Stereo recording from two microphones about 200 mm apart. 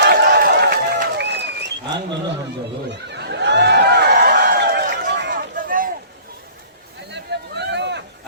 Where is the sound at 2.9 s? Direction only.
60° right (ahead or behind).